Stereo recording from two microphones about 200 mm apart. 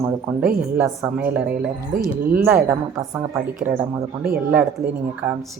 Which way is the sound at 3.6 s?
10° right (ahead or behind).